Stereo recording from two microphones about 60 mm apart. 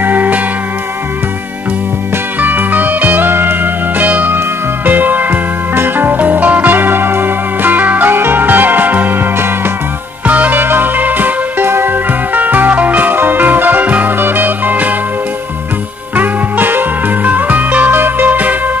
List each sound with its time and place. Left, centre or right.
0.0 s music: right
2.4 s music: right
10.6 s music: right
16.2 s music: right